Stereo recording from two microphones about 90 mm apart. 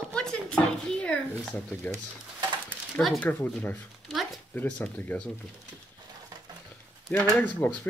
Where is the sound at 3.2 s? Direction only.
15° left (ahead or behind).